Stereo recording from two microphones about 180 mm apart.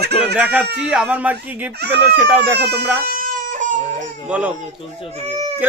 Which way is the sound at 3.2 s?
50° right (ahead or behind).